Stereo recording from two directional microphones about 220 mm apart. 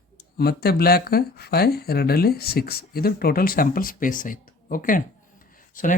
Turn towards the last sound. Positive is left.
turn(degrees=35)  # may be behind; listen again after turning